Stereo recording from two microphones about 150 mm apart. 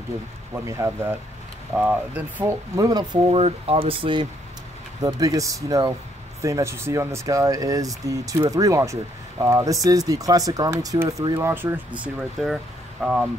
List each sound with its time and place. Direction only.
0.7 s speech: 20° right (ahead or behind)
1.8 s speech: 10° right (ahead or behind); by 4.3 s 35° right (ahead or behind)
5.0 s speech: 25° right (ahead or behind); by 13.3 s 5° right (ahead or behind)